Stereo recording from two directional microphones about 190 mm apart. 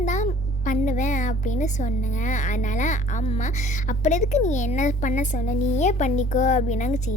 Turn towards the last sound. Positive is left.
turn(degrees=40)  # may be behind; listen again after turning